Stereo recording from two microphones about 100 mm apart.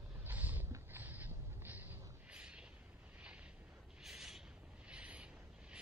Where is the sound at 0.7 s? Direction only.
30° right (ahead or behind).